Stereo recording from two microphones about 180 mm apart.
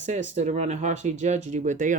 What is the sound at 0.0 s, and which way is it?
Speech, 40° right (ahead or behind).